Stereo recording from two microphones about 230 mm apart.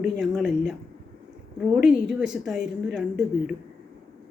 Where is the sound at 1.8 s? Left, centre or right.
Centre.